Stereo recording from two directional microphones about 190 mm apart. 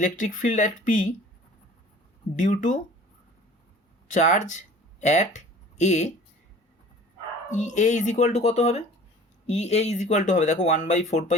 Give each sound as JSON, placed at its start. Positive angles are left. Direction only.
{"t": 0.0, "sound": "speech", "side_deg": 45}
{"t": 2.3, "sound": "speech", "side_deg": 40}
{"t": 4.1, "sound": "speech", "side_deg": 40}
{"t": 7.5, "sound": "speech", "side_deg": 40}